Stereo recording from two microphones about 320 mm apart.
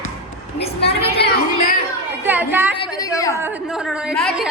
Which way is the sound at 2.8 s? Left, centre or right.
Centre.